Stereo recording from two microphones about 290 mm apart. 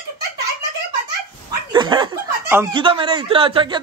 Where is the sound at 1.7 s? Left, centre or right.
Centre.